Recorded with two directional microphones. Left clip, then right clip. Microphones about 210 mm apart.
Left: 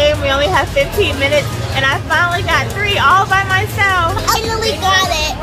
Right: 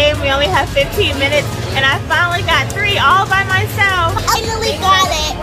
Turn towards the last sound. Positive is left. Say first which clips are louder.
# right 1 dB
turn(degrees=0)  # may be behind; listen again after turning